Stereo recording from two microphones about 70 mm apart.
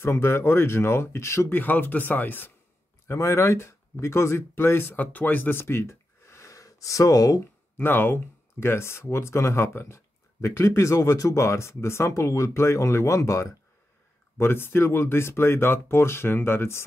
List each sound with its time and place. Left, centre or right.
0.0 s speech: left
1.5 s speech: left
3.1 s speech: left
7.7 s speech: left
14.4 s speech: left